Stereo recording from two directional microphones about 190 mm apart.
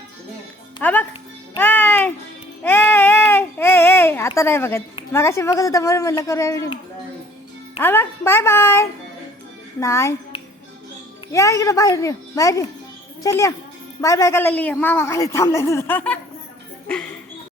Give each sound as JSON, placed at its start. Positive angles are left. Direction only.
{"t": 0.8, "sound": "a man's voice", "side_deg": 10}
{"t": 1.5, "sound": "music", "side_deg": 10}
{"t": 2.6, "sound": "a sound", "side_deg": 10}
{"t": 5.1, "sound": "a man's voice", "side_deg": 15}
{"t": 7.8, "sound": "a man's voice", "side_deg": 10}
{"t": 11.3, "sound": "a man's voice", "side_deg": 15}